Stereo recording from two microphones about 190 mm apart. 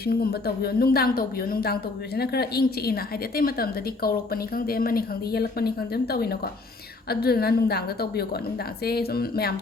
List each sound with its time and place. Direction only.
0.0 s a woman's voice: 55° left (ahead or behind)